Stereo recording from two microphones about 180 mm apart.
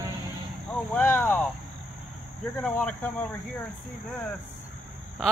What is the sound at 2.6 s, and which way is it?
Speech, 5° left (ahead or behind).